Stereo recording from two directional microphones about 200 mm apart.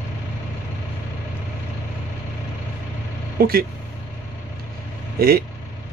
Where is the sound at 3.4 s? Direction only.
45° right (ahead or behind).